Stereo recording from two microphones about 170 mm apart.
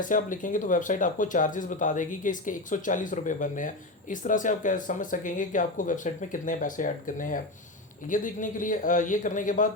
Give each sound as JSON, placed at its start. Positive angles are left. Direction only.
{"t": 0.0, "sound": "speech", "side_deg": 50}